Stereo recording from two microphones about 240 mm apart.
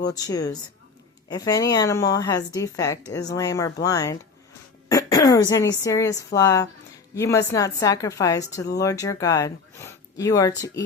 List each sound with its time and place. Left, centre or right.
0.1 s speech: centre